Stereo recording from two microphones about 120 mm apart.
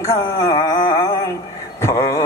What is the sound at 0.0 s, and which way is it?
Mantra, 25° left (ahead or behind).